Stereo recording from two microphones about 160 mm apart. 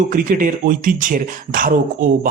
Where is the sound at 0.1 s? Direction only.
60° right (ahead or behind).